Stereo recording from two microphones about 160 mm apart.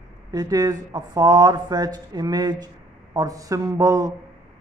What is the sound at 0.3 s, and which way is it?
Speech, 25° right (ahead or behind).